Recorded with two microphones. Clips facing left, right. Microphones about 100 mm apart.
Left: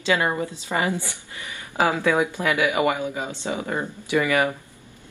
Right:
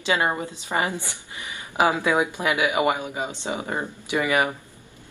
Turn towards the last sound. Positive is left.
turn(degrees=-20)  # may be behind; listen again after turning